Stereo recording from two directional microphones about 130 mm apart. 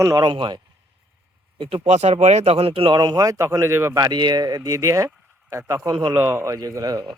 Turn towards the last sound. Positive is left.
turn(degrees=-25)  # may be behind; listen again after turning